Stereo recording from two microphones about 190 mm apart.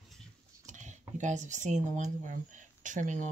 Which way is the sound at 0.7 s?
40° right (ahead or behind).